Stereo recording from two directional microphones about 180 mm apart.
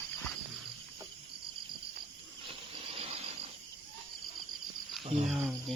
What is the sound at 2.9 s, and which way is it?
Cricket, 35° right (ahead or behind).